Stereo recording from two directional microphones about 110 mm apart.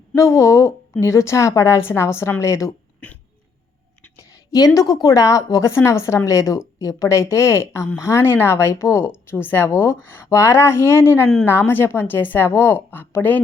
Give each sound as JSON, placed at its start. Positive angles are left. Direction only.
{"t": 0.2, "sound": "a woman's voice", "side_deg": 25}
{"t": 4.2, "sound": "a woman's voice", "side_deg": 35}